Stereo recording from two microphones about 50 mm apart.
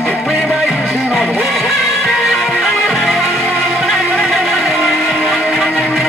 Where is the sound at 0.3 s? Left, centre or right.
Right.